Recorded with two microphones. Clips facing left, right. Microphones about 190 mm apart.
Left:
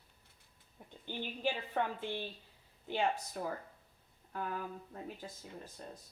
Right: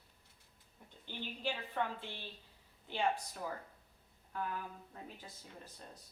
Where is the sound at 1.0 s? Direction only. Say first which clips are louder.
Left 4 dB; 50° left (ahead or behind).